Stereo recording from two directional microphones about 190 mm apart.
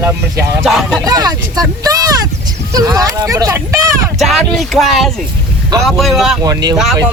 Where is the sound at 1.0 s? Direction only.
20° right (ahead or behind).